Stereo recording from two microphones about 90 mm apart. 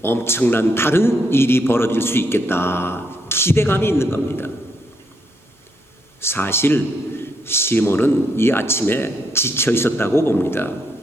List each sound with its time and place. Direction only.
0.0 s a man's voice: 25° left (ahead or behind)
6.1 s a man's voice: 25° left (ahead or behind)